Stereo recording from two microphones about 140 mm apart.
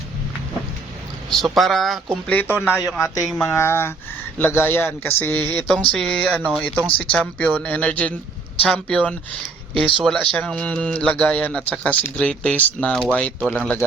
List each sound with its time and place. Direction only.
1.3 s speech: centre (ahead or behind)
2.2 s speech: 10° left (ahead or behind)
3.2 s speech: 5° left (ahead or behind)
3.5 s speech: 20° left (ahead or behind)